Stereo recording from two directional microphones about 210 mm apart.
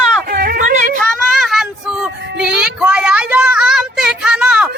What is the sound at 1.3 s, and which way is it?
Child singing, centre (ahead or behind).